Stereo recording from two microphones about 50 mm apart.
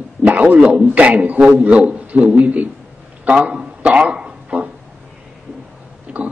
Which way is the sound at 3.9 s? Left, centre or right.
Right.